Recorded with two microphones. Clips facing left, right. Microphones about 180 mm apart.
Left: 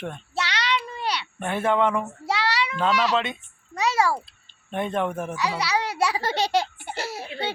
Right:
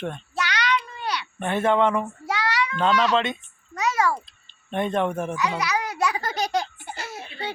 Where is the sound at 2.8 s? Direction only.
5° left (ahead or behind).